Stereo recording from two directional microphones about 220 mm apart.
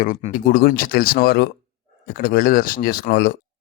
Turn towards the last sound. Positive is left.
turn(degrees=50)  # may be behind; listen again after turning